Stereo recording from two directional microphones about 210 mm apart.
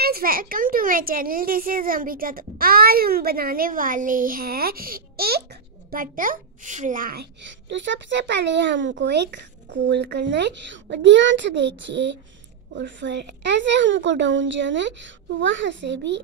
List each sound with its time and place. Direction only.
0.0 s a child's voice: 45° right (ahead or behind)